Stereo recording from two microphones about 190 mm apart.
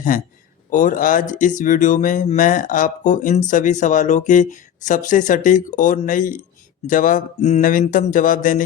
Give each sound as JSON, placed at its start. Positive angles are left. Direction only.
{"t": 0.1, "sound": "speech", "side_deg": 45}